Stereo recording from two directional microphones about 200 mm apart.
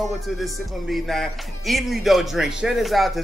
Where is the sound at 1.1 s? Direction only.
Centre (ahead or behind).